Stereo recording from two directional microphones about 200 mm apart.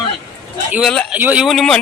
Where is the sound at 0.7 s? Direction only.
5° left (ahead or behind).